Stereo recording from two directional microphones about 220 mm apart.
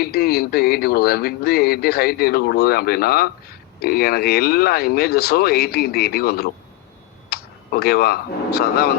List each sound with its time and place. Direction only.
0.0 s speech: 45° left (ahead or behind)